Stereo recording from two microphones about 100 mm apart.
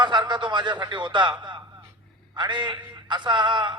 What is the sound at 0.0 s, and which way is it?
A man's voice, 50° right (ahead or behind).